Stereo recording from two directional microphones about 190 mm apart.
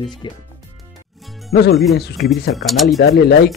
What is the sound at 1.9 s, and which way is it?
Speech, 60° left (ahead or behind).